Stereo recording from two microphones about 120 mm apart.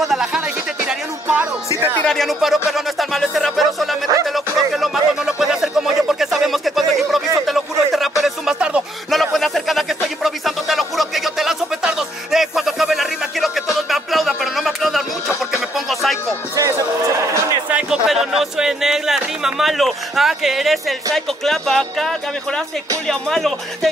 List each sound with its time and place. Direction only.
0.0 s music: 5° right (ahead or behind)
2.0 s speech: 5° left (ahead or behind)
4.3 s music: centre (ahead or behind)
9.2 s a sound: centre (ahead or behind)
13.7 s music: centre (ahead or behind)
16.5 s music: 25° right (ahead or behind)
17.6 s a sound: 5° right (ahead or behind)
23.0 s speech: 5° left (ahead or behind)